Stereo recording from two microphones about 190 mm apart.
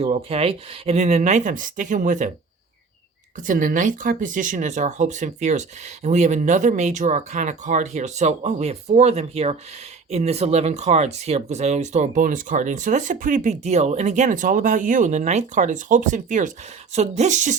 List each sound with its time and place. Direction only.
0.0 s speech: 30° right (ahead or behind)
3.3 s speech: 45° right (ahead or behind)